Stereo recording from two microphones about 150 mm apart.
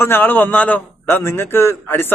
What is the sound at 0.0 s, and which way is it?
A man's voice, 15° left (ahead or behind).